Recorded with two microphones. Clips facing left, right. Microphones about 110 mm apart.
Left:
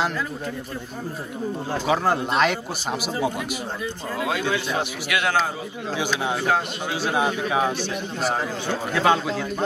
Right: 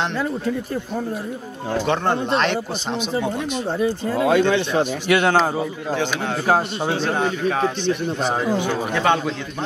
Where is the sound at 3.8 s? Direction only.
35° right (ahead or behind).